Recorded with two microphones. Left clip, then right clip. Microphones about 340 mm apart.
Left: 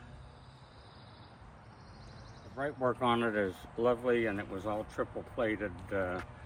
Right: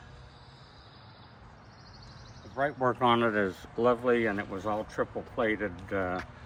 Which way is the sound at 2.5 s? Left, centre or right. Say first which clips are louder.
Right 5 dB; right.